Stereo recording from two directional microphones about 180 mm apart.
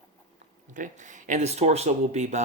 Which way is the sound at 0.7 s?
45° right (ahead or behind).